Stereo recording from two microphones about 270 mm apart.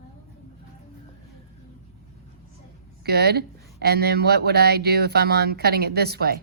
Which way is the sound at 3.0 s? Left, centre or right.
Right.